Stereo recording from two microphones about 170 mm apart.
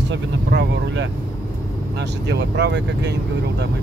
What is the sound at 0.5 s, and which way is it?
Speech, 90° right.